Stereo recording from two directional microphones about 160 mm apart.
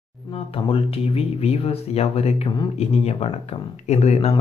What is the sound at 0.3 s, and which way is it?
Speech, 35° left (ahead or behind).